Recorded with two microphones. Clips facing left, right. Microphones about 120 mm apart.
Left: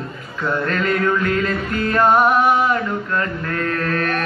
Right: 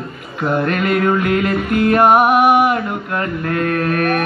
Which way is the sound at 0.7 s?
15° right (ahead or behind).